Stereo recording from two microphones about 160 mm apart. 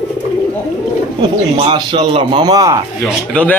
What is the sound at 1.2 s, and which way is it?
A man's voice, 30° right (ahead or behind).